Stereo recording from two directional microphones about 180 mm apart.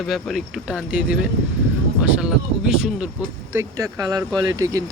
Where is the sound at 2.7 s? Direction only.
5° right (ahead or behind).